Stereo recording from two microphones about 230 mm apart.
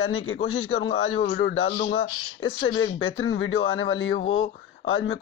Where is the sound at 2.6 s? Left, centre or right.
Left.